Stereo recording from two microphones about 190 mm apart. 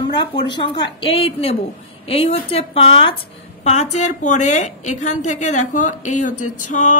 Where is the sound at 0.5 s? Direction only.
25° left (ahead or behind).